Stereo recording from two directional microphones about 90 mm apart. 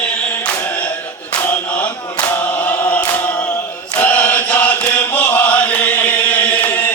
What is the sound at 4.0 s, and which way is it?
Chant, 20° left (ahead or behind).